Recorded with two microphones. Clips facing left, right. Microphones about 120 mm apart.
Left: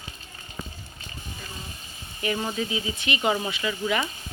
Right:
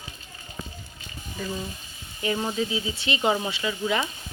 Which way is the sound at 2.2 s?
15° right (ahead or behind).